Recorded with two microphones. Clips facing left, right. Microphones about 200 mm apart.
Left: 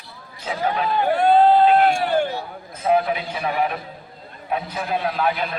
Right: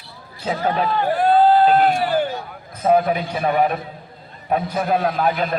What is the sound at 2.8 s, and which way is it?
A man's voice, 45° right (ahead or behind).